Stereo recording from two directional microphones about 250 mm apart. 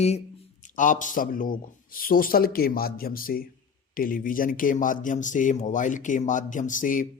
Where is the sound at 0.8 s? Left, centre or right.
Left.